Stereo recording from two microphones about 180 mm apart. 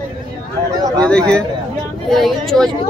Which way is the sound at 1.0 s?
5° left (ahead or behind).